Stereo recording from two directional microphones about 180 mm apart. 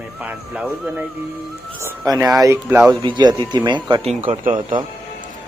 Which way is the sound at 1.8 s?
15° right (ahead or behind).